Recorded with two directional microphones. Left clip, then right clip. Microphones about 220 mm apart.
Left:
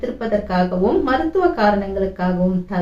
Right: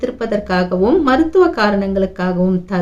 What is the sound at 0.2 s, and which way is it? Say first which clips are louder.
A woman's voice: even; 50° right (ahead or behind).